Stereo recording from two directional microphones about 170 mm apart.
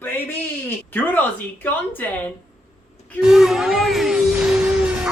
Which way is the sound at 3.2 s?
Centre (ahead or behind).